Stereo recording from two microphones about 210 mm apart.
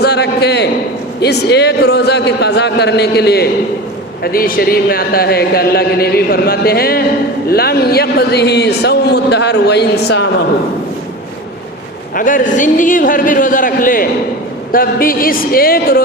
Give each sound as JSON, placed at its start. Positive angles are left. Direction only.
{"t": 0.0, "sound": "a sound", "side_deg": 50}
{"t": 1.2, "sound": "a man's voice", "side_deg": 50}
{"t": 12.1, "sound": "a man's voice", "side_deg": 40}